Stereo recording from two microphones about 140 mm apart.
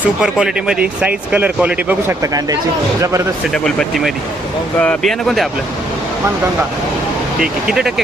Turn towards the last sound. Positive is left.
turn(degrees=-5)  # may be behind; listen again after turning